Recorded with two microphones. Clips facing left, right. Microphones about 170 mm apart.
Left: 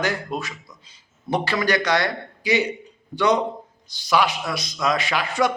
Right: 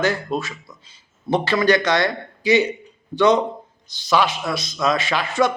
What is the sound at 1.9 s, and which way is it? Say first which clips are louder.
Speech: right 2 dB; 15° left (ahead or behind).